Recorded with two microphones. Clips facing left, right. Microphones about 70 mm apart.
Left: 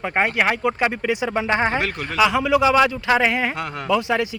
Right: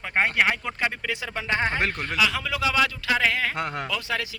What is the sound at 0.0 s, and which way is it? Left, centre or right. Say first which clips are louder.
Speech: left 3 dB; centre.